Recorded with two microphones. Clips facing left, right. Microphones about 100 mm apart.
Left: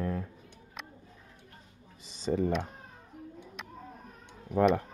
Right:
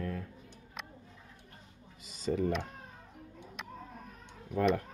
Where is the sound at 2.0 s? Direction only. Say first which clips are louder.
Left 2 dB; 30° left (ahead or behind).